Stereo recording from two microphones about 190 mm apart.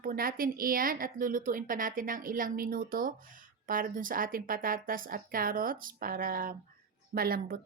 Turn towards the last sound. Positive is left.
turn(degrees=-50)  # may be behind; listen again after turning